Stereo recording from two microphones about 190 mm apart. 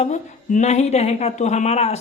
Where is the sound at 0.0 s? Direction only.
40° left (ahead or behind).